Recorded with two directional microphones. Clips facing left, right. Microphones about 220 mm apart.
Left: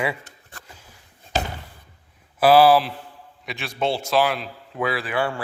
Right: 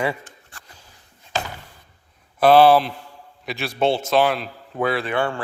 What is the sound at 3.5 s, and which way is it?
Speech, 30° right (ahead or behind).